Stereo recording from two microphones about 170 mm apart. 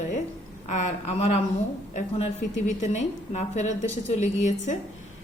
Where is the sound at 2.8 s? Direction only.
45° left (ahead or behind).